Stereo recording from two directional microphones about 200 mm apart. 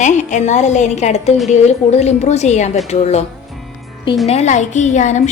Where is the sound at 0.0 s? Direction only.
35° left (ahead or behind).